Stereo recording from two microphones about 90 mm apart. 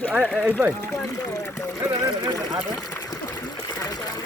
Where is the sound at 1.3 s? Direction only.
35° left (ahead or behind).